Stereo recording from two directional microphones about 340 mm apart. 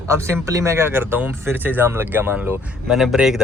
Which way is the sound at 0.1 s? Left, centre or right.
Centre.